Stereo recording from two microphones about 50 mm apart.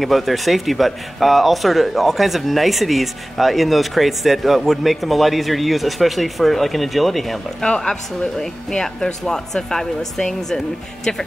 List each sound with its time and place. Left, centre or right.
0.0 s speech: centre
7.6 s speech: centre